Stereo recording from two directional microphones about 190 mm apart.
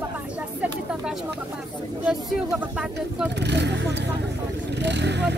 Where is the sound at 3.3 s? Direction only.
65° right (ahead or behind).